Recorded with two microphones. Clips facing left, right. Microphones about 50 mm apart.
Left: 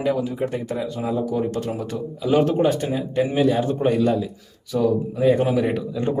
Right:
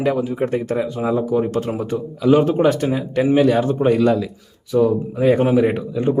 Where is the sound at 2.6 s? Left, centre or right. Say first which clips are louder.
Right 4 dB; right.